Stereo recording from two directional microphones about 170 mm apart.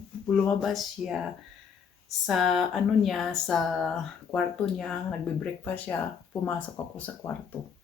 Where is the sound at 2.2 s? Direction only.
Centre (ahead or behind).